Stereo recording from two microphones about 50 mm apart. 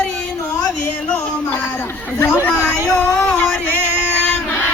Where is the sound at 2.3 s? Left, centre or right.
Left.